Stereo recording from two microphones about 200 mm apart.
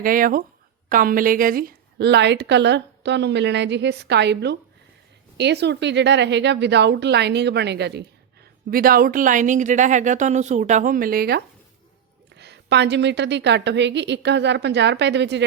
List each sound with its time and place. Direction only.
0.0 s a woman's voice: 45° right (ahead or behind)
8.7 s a woman's voice: 45° right (ahead or behind)